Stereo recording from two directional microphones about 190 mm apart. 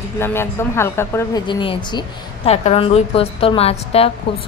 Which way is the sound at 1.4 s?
25° left (ahead or behind).